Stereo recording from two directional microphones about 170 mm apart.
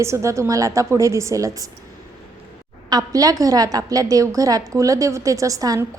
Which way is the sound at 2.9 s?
20° right (ahead or behind).